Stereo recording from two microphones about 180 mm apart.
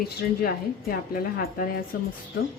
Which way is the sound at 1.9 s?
55° left (ahead or behind).